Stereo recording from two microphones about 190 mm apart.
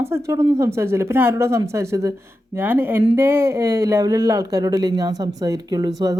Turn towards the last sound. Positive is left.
turn(degrees=-20)  # may be behind; listen again after turning